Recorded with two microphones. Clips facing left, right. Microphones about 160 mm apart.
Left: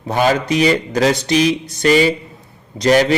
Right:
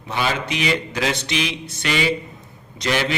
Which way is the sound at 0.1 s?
40° left (ahead or behind).